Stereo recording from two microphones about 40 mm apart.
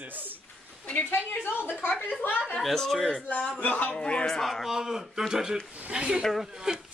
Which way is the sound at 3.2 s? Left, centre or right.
Left.